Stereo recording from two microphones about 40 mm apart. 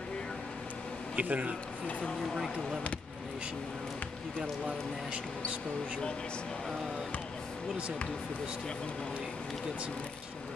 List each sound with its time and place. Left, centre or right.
1.1 s a man's voice: right
4.4 s speech: right